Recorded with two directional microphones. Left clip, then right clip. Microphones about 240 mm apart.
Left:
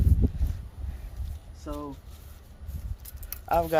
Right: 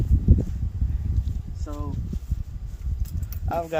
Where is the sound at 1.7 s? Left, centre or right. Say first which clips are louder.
Left 1 dB; left.